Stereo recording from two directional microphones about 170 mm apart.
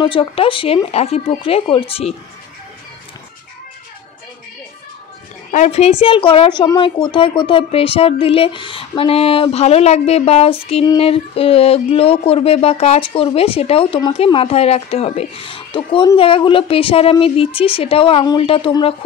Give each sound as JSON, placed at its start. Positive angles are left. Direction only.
{"t": 0.0, "sound": "a woman's voice", "side_deg": 30}
{"t": 5.5, "sound": "a woman's voice", "side_deg": 40}